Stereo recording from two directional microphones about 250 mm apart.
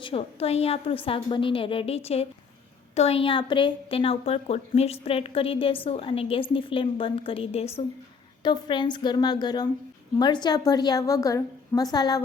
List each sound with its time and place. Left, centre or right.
0.0 s a woman's voice: left